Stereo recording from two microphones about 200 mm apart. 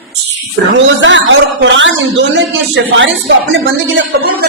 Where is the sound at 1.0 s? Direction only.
70° right (ahead or behind).